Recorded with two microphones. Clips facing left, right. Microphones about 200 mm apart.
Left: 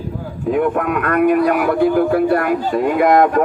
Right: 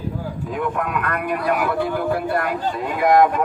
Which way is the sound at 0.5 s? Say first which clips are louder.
Left 7 dB; 55° left (ahead or behind).